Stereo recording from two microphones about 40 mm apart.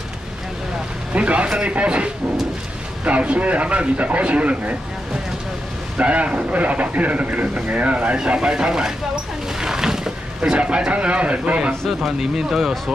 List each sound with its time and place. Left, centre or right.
1.1 s speech: right
3.1 s speech: right
5.9 s speech: right
8.3 s a sound: right
10.9 s speech: right
12.0 s speech: centre